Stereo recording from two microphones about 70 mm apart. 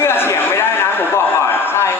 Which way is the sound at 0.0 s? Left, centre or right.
Left.